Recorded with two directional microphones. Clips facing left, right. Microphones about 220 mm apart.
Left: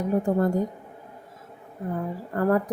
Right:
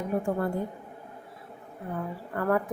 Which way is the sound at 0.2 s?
40° left (ahead or behind).